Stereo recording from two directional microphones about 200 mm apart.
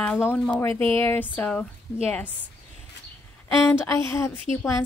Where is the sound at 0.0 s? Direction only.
10° left (ahead or behind).